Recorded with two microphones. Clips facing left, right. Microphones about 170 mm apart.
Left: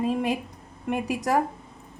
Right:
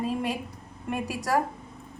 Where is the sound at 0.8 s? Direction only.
20° left (ahead or behind).